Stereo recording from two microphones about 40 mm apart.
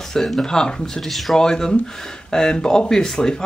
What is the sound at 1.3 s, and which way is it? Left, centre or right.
Speech, centre.